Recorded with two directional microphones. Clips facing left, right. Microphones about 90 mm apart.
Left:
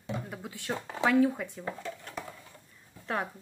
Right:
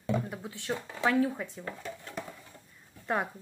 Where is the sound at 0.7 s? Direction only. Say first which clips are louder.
Left 1 dB; 25° left (ahead or behind).